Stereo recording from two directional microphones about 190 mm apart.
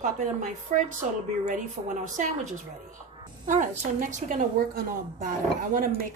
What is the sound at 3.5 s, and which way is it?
A woman's voice, 40° right (ahead or behind).